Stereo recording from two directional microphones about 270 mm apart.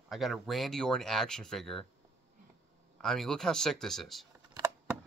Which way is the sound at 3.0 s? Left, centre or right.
Centre.